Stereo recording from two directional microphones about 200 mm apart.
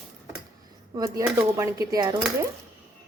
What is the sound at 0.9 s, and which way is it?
Speech, 15° right (ahead or behind).